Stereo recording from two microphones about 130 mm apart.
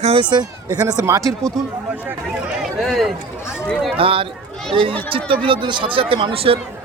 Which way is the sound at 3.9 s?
45° right (ahead or behind).